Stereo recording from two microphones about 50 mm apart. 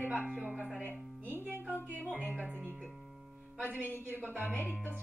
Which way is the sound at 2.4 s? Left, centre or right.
Right.